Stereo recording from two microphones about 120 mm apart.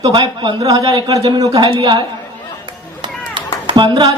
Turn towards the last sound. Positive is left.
turn(degrees=-40)  # may be behind; listen again after turning